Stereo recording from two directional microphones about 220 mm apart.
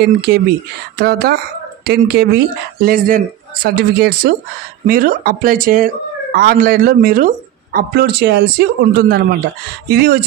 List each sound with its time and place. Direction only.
0.0 s speech: 45° right (ahead or behind)
1.9 s speech: 45° right (ahead or behind)